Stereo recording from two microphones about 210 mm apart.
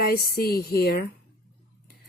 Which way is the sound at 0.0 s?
45° left (ahead or behind).